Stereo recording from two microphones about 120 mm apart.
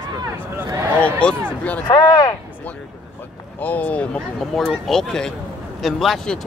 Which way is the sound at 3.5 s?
15° left (ahead or behind).